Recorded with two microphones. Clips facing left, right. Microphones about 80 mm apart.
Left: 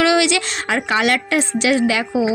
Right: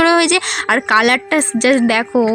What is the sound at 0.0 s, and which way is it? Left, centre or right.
A woman's voice, right.